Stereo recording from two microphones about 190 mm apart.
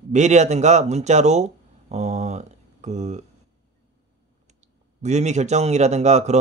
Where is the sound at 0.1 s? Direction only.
35° right (ahead or behind).